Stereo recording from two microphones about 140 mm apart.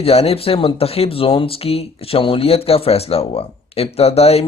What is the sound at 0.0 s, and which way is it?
Speech, 45° left (ahead or behind).